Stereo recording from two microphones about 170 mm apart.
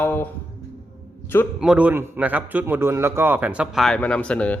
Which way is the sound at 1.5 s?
5° right (ahead or behind).